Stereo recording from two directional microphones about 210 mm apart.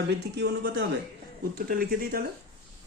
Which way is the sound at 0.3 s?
50° right (ahead or behind).